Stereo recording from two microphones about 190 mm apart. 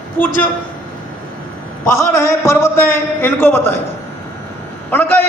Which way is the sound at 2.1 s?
15° left (ahead or behind).